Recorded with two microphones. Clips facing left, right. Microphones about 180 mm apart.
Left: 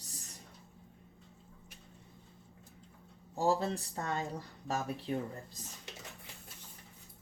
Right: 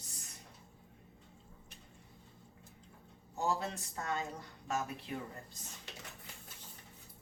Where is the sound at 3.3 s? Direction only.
35° left (ahead or behind).